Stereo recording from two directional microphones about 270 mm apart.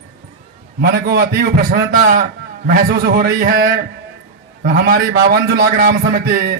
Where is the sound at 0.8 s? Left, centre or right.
Right.